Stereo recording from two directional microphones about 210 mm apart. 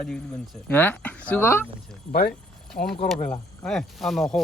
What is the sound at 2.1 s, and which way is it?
Speech, 45° left (ahead or behind).